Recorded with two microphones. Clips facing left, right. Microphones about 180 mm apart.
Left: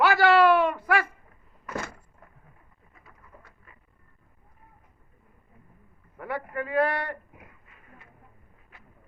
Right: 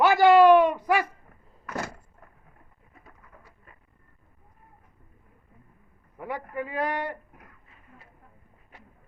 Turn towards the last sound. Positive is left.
turn(degrees=-15)  # may be behind; listen again after turning